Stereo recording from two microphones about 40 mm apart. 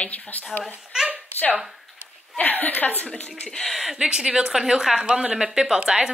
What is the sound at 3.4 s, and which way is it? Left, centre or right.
Speech, centre.